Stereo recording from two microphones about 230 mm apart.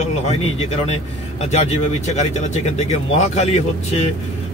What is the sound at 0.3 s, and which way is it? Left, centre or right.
Speech, left.